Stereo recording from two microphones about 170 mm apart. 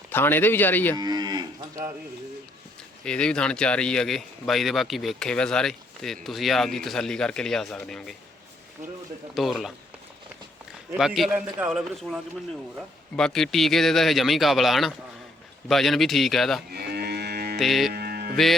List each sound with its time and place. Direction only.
0.1 s speech: 10° left (ahead or behind)
0.9 s moo: 25° right (ahead or behind)
3.0 s speech: 5° left (ahead or behind)
9.3 s speech: centre (ahead or behind)
10.9 s speech: centre (ahead or behind)
16.7 s livestock: 70° right (ahead or behind)
17.6 s speech: centre (ahead or behind)
17.9 s music: 65° right (ahead or behind)